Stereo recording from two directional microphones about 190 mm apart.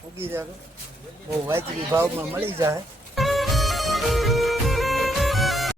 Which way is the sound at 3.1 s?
Centre (ahead or behind).